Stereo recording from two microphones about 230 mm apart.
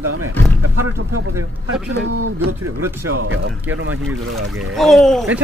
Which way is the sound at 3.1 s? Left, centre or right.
Right.